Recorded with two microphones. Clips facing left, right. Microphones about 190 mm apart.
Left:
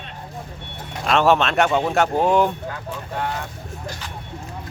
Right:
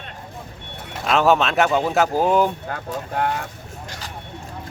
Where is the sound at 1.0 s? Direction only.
Centre (ahead or behind).